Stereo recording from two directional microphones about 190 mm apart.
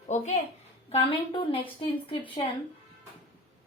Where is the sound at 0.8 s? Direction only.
25° left (ahead or behind).